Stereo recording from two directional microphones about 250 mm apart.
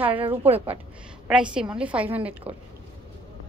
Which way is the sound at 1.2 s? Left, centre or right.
Centre.